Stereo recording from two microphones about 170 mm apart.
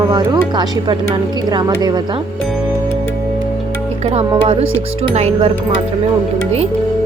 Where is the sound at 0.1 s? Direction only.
25° right (ahead or behind).